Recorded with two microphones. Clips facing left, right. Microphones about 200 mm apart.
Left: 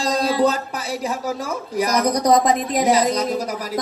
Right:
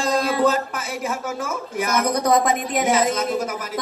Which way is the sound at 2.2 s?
15° left (ahead or behind).